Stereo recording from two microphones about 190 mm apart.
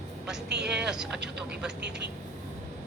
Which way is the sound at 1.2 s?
60° right (ahead or behind).